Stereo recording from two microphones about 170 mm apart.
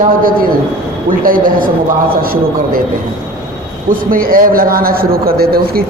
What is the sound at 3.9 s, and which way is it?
A man's voice, 55° right (ahead or behind).